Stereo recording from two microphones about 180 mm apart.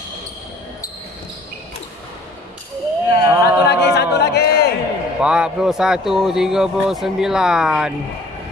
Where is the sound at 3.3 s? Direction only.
10° right (ahead or behind).